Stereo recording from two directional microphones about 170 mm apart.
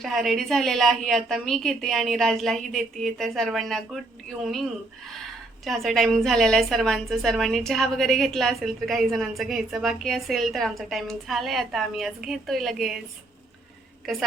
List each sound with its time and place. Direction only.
0.0 s a woman's voice: centre (ahead or behind)
5.1 s a woman's voice: centre (ahead or behind)